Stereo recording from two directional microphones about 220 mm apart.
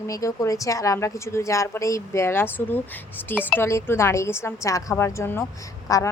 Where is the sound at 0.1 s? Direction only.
15° left (ahead or behind).